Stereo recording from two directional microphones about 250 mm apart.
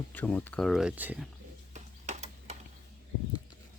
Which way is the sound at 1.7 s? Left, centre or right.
Right.